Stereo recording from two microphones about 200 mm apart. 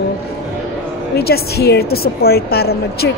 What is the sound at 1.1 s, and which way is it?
A woman's voice, 50° left (ahead or behind).